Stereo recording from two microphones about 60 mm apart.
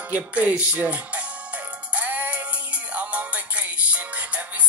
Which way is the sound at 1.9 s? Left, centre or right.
Right.